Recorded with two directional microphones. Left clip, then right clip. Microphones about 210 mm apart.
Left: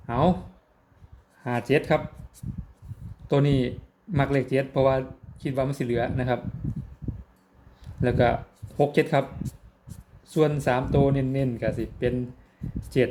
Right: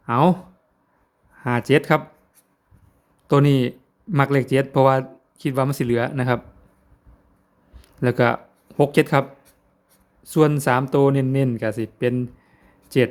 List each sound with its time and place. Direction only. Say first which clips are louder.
0.0 s speech: right 6 dB; 30° right (ahead or behind)
1.5 s speech: right 5 dB; 30° right (ahead or behind)
3.2 s speech: right 6 dB; 30° right (ahead or behind)
7.8 s a sound: right 3 dB; 30° right (ahead or behind)
8.8 s speech: right 4 dB; 30° right (ahead or behind)
10.2 s speech: right 5 dB; 35° right (ahead or behind)